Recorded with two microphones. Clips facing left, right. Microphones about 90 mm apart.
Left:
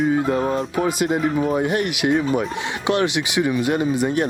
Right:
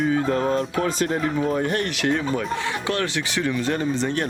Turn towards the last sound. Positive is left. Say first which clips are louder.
# left 4 dB
turn(degrees=10)  # may be behind; listen again after turning